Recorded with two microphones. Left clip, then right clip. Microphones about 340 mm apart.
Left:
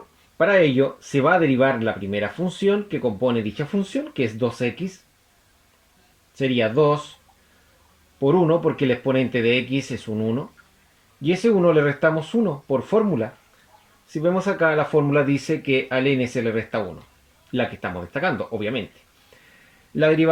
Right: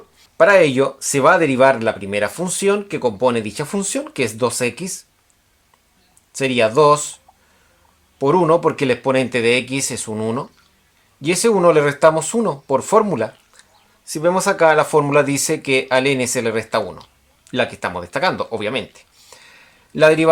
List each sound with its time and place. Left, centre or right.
0.4 s speech: right
6.3 s speech: right
8.2 s speech: right
20.0 s speech: right